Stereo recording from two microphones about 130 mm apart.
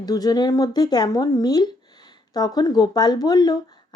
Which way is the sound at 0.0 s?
30° left (ahead or behind).